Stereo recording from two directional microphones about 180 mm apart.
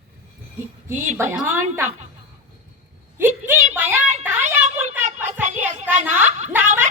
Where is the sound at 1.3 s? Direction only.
10° right (ahead or behind).